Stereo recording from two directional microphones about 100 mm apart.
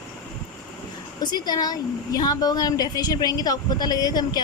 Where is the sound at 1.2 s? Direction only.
45° left (ahead or behind).